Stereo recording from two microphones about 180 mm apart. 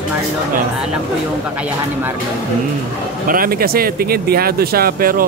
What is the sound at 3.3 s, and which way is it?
Speech, 55° right (ahead or behind).